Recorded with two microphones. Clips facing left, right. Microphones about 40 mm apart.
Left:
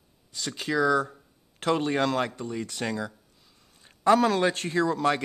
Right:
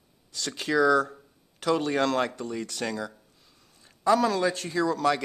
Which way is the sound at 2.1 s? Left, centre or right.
Centre.